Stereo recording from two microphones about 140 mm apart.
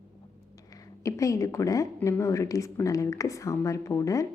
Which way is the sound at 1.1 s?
25° left (ahead or behind).